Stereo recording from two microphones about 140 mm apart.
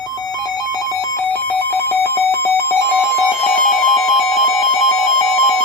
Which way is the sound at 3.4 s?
5° left (ahead or behind).